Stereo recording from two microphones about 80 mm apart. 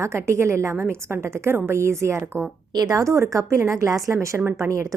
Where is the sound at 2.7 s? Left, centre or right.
Right.